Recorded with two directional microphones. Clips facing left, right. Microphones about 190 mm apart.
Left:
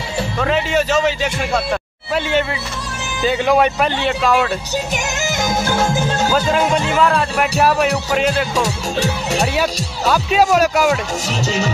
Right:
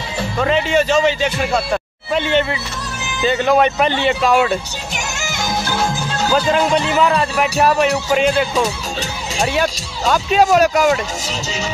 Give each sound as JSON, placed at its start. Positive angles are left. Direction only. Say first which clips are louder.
{"t": 0.4, "sound": "a man's voice", "louder": "right 2 dB", "side_deg": 0}
{"t": 5.2, "sound": "music", "louder": "left 2 dB", "side_deg": 45}
{"t": 6.5, "sound": "a man's voice", "louder": "right 1 dB", "side_deg": 5}
{"t": 11.2, "sound": "speech", "louder": "left 5 dB", "side_deg": 60}